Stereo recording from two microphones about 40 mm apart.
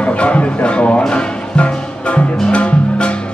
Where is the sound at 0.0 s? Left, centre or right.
Left.